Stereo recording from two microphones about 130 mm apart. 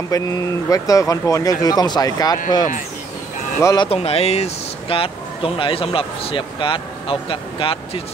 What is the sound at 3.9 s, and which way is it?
Speech, 50° left (ahead or behind).